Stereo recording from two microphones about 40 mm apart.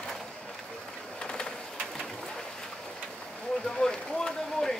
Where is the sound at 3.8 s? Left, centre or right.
Centre.